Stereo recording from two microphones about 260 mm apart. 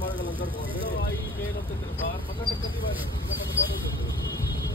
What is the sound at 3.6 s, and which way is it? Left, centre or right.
Speech, left.